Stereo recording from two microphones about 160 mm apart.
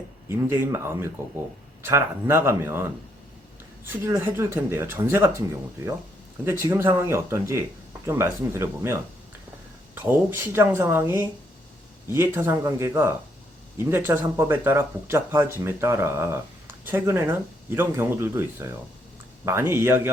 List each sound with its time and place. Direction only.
0.3 s speech: 15° right (ahead or behind)
6.4 s speech: 15° right (ahead or behind)